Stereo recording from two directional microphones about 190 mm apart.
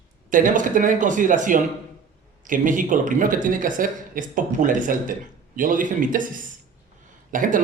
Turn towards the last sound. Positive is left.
turn(degrees=-45)  # may be behind; listen again after turning